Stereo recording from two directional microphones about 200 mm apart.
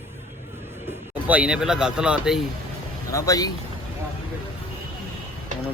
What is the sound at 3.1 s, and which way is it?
Speech, 15° left (ahead or behind).